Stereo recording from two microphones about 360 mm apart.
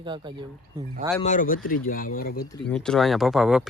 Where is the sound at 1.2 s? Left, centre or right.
Left.